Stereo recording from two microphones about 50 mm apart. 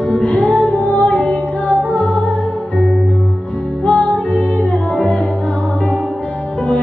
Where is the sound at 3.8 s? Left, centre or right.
Left.